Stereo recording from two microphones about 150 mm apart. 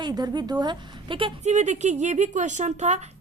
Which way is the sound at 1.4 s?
50° right (ahead or behind).